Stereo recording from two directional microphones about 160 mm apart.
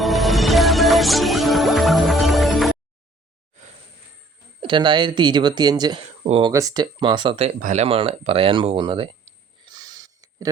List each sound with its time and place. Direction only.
0.0 s music: centre (ahead or behind)
4.6 s speech: 30° right (ahead or behind)
6.2 s speech: 40° right (ahead or behind)
6.5 s speech: 20° right (ahead or behind)
9.6 s a sound: 25° right (ahead or behind)